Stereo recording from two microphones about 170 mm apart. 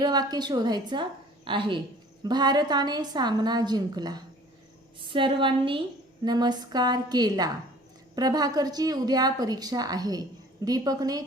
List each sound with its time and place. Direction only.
0.0 s a woman's voice: 25° right (ahead or behind)